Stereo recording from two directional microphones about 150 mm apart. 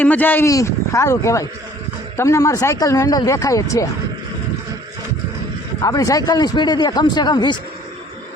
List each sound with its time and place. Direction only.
0.0 s speech: 10° left (ahead or behind)
5.8 s speech: 25° left (ahead or behind)